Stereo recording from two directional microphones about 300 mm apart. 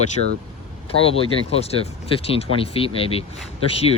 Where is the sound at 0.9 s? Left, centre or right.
Centre.